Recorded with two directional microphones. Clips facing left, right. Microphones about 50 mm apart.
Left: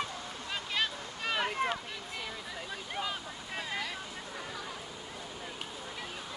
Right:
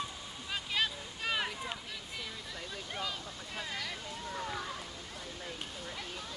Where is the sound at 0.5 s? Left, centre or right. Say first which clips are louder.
Even; centre.